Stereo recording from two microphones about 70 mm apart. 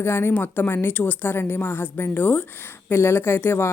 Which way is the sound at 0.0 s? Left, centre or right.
Left.